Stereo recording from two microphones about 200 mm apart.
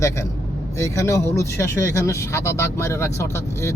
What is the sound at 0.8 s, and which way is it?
Speech, 15° left (ahead or behind).